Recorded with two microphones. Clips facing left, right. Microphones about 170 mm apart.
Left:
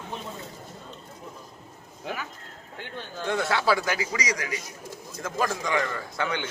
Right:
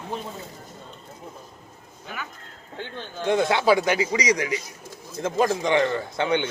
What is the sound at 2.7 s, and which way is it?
A man's voice, 20° right (ahead or behind).